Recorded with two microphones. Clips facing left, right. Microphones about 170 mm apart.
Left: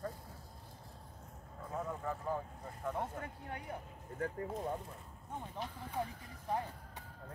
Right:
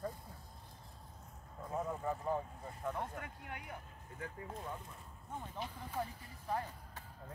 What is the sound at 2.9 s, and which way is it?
Speech, 30° left (ahead or behind).